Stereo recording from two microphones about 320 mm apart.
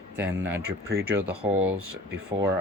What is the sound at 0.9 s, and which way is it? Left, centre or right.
Speech, right.